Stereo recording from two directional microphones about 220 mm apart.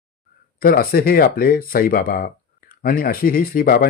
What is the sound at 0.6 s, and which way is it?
Speech, 40° left (ahead or behind).